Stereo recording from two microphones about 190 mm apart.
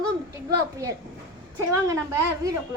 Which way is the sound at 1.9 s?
15° right (ahead or behind).